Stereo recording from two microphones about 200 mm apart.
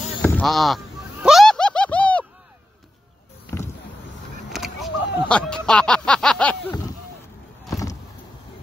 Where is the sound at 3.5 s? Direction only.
15° left (ahead or behind).